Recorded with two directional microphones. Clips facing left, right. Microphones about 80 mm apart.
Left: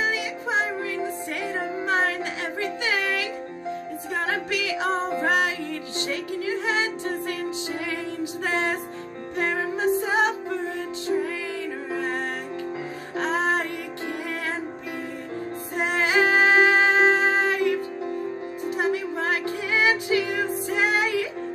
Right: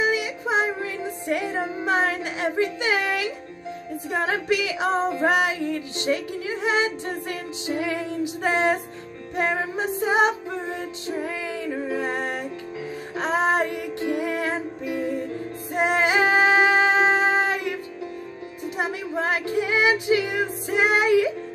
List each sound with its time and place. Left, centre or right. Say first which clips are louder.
0.0 s music: right 3 dB; centre
1.9 s music: right 1 dB; centre
13.1 s music: right 2 dB; centre
15.7 s music: right 2 dB; centre
18.8 s music: left 1 dB; centre